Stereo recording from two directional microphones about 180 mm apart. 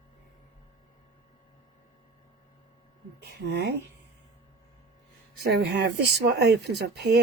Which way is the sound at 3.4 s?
70° right (ahead or behind).